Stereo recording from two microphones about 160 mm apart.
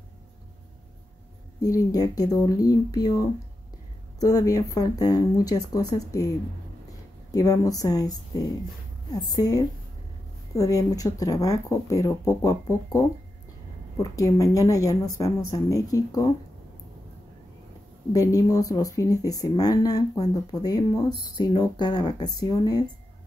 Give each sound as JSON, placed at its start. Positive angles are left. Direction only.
{"t": 1.6, "sound": "a woman's voice", "side_deg": 20}
{"t": 18.1, "sound": "speech", "side_deg": 20}